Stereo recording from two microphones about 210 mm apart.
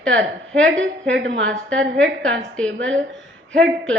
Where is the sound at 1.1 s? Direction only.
60° right (ahead or behind).